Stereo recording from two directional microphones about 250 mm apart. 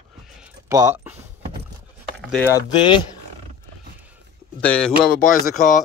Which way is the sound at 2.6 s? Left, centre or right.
Centre.